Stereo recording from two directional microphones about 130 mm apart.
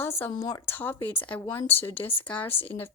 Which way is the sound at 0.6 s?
15° left (ahead or behind).